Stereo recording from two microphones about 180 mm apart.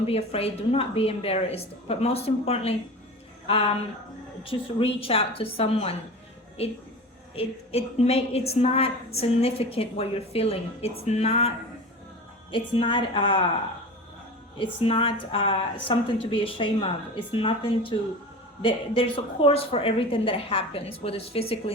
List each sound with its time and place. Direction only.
0.0 s a woman's voice: 35° left (ahead or behind)
7.3 s a woman's voice: 35° left (ahead or behind)
14.6 s a woman's voice: 30° left (ahead or behind)